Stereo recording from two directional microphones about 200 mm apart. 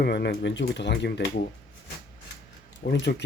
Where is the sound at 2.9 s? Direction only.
60° left (ahead or behind).